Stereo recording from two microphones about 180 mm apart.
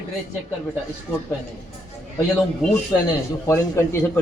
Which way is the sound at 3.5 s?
15° left (ahead or behind).